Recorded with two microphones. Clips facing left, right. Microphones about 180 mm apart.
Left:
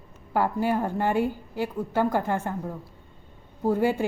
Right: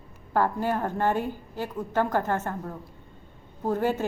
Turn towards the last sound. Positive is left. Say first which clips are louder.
# left 3 dB
turn(degrees=10)  # may be behind; listen again after turning